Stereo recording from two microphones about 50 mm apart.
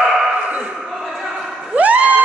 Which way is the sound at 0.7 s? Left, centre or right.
Centre.